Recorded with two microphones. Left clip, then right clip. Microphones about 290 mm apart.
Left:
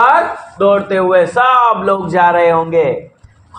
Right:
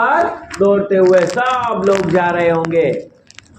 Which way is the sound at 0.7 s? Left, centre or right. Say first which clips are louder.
Even; left.